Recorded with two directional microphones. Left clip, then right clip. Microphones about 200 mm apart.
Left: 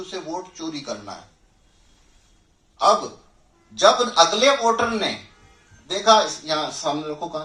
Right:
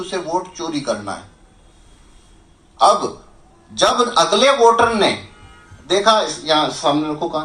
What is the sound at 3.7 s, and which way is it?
A man's voice, 40° right (ahead or behind).